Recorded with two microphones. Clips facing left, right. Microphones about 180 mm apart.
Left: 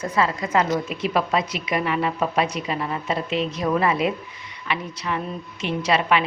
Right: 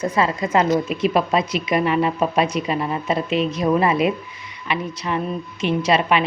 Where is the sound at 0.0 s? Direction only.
20° right (ahead or behind).